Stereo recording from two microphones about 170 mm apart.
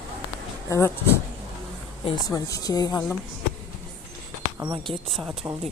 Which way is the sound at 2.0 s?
20° left (ahead or behind).